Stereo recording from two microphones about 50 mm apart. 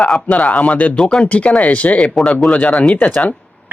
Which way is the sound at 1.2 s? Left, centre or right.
Left.